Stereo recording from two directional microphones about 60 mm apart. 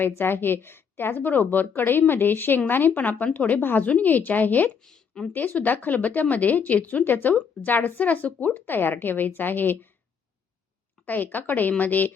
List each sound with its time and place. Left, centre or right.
0.0 s a woman's voice: left
3.6 s a woman's voice: left
4.9 s a sound: centre
5.3 s a woman's voice: left
11.0 s speech: left